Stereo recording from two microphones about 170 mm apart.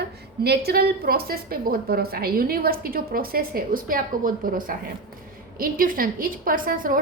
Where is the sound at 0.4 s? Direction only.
70° right (ahead or behind).